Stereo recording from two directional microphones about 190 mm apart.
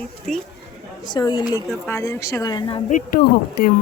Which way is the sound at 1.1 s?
25° left (ahead or behind).